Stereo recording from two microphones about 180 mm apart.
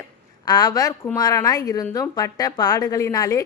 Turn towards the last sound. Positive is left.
turn(degrees=20)  # may be behind; listen again after turning